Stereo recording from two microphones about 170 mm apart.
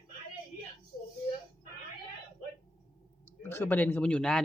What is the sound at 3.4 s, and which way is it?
Speech, 15° left (ahead or behind).